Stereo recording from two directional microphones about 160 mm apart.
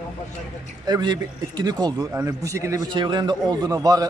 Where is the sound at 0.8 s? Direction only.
25° right (ahead or behind).